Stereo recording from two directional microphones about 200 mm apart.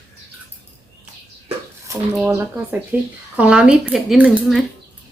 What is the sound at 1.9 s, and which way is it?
Speech, 15° right (ahead or behind).